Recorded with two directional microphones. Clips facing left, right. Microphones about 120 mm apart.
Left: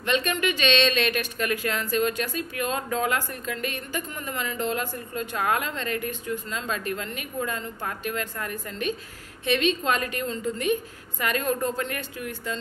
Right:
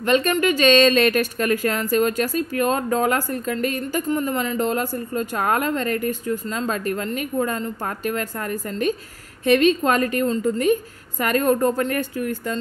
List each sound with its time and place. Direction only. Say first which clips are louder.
0.0 s a woman's voice: right 7 dB; 40° right (ahead or behind)